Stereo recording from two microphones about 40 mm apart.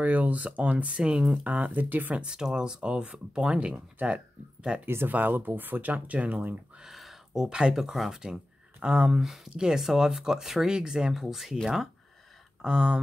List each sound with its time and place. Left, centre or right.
0.0 s speech: right
0.9 s speech: centre
1.4 s speech: right
2.1 s speech: right
4.8 s speech: right
5.4 s speech: right
6.8 s a sound: centre
7.4 s speech: centre
9.1 s speech: centre
12.6 s speech: right